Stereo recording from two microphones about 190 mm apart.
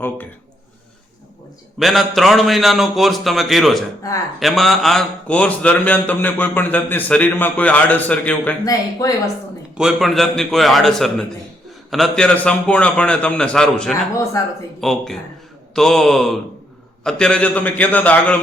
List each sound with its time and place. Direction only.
1.8 s a man's voice: centre (ahead or behind)
8.7 s speech: 20° left (ahead or behind)
9.7 s a man's voice: centre (ahead or behind)
14.4 s speech: 20° left (ahead or behind)
14.8 s a man's voice: centre (ahead or behind)